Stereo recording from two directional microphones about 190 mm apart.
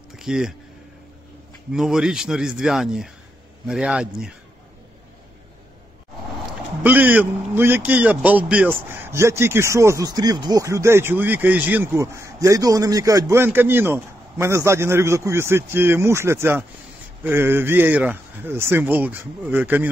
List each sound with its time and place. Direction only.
0.1 s speech: 5° right (ahead or behind)
1.7 s speech: 5° right (ahead or behind)
6.8 s a man's voice: 10° right (ahead or behind)